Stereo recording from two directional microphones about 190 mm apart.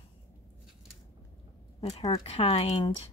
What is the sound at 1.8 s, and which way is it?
Speech, 30° left (ahead or behind).